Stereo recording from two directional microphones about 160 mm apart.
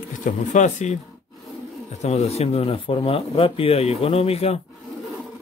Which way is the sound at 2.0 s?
40° left (ahead or behind).